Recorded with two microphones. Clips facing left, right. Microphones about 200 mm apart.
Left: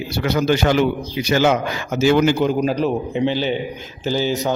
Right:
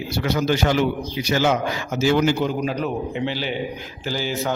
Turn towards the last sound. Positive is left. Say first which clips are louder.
# left 6 dB
turn(degrees=20)  # may be behind; listen again after turning